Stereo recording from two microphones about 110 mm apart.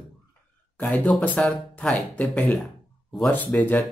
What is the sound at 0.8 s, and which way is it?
Speech, 15° left (ahead or behind).